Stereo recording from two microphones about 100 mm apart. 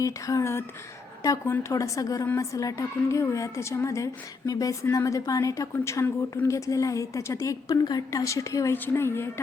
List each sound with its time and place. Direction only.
0.0 s a woman's voice: 35° left (ahead or behind)